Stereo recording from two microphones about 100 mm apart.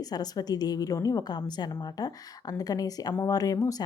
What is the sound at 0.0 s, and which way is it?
Speech, 40° left (ahead or behind).